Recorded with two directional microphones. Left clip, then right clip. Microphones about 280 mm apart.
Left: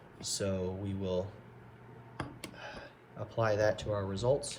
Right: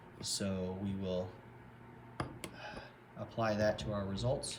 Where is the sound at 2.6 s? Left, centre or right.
Left.